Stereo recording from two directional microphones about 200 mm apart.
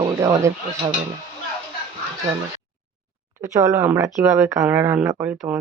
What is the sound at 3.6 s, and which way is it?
Speech, 10° right (ahead or behind).